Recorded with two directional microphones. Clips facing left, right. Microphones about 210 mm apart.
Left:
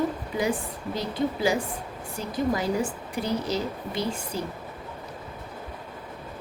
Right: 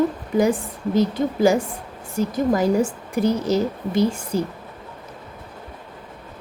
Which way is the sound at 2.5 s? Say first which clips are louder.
Right 7 dB; 45° right (ahead or behind).